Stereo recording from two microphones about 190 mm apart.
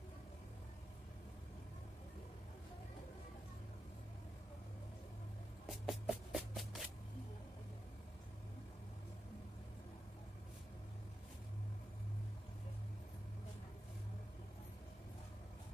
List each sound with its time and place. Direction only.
5.7 s music: 5° right (ahead or behind)